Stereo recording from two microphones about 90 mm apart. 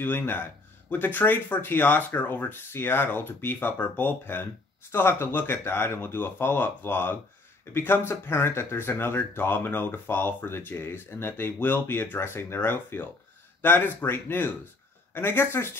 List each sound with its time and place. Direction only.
0.0 s speech: 20° left (ahead or behind)